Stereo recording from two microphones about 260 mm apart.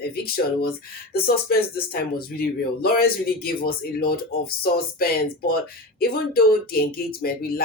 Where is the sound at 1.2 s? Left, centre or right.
Left.